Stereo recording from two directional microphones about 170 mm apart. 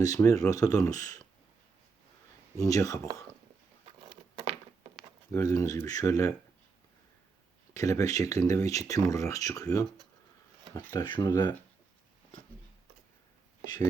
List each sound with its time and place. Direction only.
0.0 s speech: 20° left (ahead or behind)
2.6 s speech: 20° left (ahead or behind)
5.3 s speech: 20° left (ahead or behind)
7.7 s speech: 20° left (ahead or behind)